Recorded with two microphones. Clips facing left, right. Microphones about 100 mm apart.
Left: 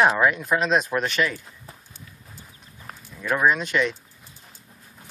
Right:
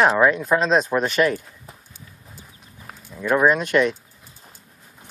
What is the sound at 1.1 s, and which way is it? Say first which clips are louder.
Speech: right 5 dB; 50° right (ahead or behind).